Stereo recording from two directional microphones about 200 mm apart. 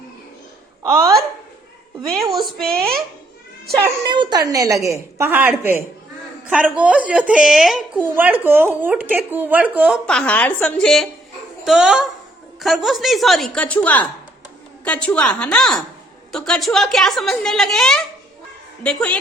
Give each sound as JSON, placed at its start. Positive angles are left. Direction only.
{"t": 0.8, "sound": "a woman's voice", "side_deg": -15}
{"t": 2.0, "sound": "a woman's voice", "side_deg": 0}
{"t": 3.8, "sound": "a child's voice", "side_deg": -20}